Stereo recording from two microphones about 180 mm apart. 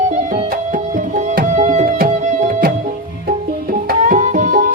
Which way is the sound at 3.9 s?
45° right (ahead or behind).